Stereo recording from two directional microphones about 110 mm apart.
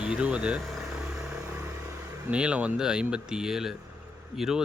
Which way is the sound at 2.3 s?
10° right (ahead or behind).